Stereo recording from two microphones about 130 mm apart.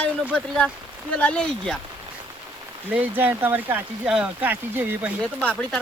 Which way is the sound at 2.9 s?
15° right (ahead or behind).